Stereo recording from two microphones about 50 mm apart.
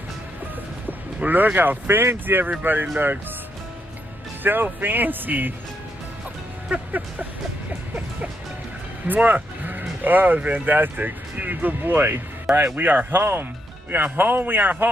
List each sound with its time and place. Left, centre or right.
0.8 s speech: right
4.4 s speech: right
6.7 s speech: right
9.0 s sheep: right
10.0 s speech: right